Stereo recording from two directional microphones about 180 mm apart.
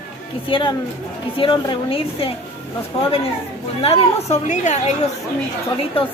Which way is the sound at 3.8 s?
35° left (ahead or behind).